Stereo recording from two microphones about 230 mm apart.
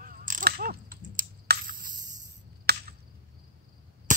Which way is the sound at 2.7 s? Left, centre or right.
Right.